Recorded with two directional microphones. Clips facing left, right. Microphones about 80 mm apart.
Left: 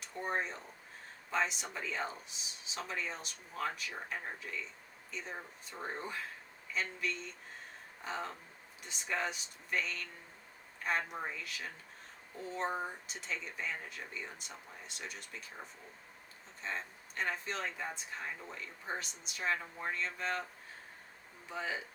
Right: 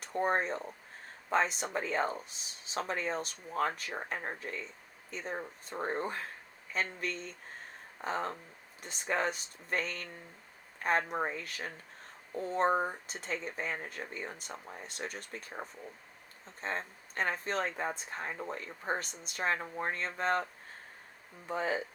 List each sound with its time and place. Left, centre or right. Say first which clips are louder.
0.0 s speech: right 6 dB; right
21.4 s speech: right 6 dB; right